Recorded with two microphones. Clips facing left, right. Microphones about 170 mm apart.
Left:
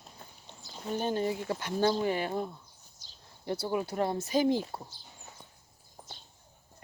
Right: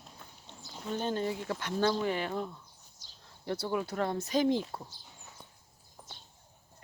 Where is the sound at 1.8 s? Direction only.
35° left (ahead or behind).